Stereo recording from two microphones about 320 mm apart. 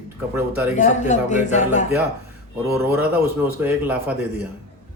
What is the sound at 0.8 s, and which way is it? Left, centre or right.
A man's voice, left.